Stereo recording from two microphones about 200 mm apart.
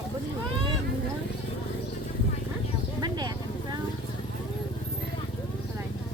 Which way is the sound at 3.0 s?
20° right (ahead or behind).